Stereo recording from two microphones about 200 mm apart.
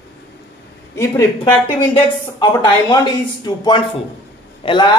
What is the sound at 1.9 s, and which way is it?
Speech, 20° left (ahead or behind).